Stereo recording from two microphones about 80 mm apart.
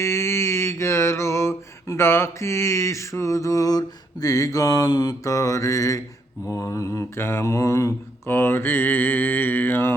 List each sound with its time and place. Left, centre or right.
0.0 s mantra: left